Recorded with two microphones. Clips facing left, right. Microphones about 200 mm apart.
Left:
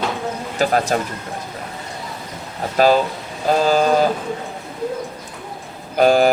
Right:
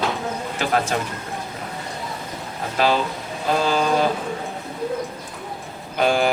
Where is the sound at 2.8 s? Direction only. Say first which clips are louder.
Left 6 dB; 40° left (ahead or behind).